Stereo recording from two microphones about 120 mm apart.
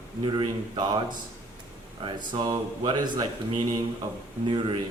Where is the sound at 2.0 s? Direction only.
40° right (ahead or behind).